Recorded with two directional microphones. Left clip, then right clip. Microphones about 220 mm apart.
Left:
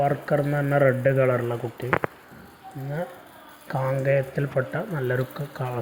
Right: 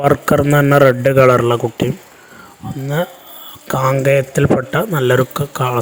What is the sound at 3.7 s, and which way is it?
A man's voice, 45° right (ahead or behind).